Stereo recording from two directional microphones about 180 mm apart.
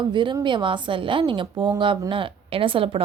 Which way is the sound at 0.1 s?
25° right (ahead or behind).